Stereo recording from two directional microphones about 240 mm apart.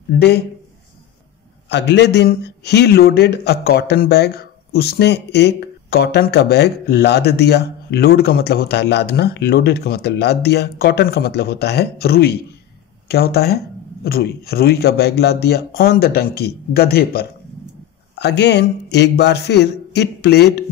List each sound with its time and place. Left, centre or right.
1.7 s a man's voice: left